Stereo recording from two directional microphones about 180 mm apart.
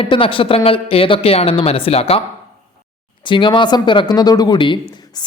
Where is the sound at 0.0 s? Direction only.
30° left (ahead or behind).